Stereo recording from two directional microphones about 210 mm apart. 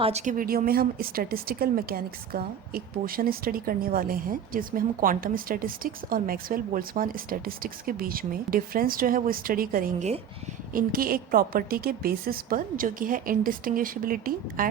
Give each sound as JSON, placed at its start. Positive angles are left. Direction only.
{"t": 0.0, "sound": "a woman's voice", "side_deg": -30}